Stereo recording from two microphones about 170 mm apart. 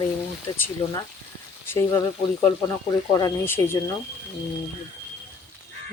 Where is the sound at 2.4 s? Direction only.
20° left (ahead or behind).